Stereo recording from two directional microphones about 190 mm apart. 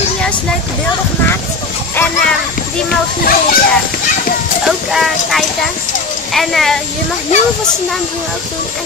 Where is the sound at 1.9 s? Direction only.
10° left (ahead or behind).